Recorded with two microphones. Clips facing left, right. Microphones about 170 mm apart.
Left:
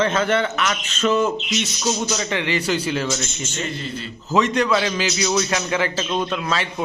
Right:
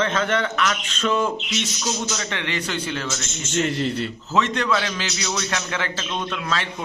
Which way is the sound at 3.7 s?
75° right (ahead or behind).